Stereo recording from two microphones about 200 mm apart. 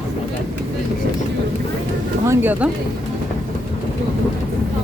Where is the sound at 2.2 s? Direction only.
10° right (ahead or behind).